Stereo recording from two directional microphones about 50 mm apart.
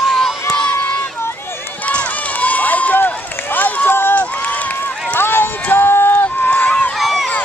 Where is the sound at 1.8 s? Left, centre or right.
Left.